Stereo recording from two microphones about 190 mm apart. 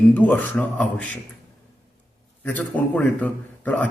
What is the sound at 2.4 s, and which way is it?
A man's voice, 10° left (ahead or behind).